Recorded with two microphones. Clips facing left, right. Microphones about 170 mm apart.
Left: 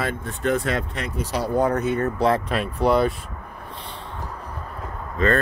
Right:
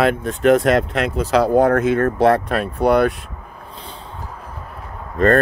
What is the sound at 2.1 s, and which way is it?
Speech, 65° right (ahead or behind).